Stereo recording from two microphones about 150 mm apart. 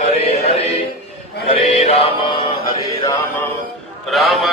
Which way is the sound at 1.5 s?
40° left (ahead or behind).